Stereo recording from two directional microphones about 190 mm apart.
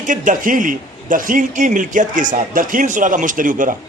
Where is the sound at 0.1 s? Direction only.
45° right (ahead or behind).